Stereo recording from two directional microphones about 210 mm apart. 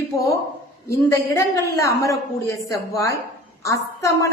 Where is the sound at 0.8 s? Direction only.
15° left (ahead or behind).